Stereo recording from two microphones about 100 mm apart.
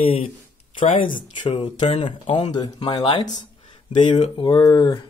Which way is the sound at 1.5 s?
75° left (ahead or behind).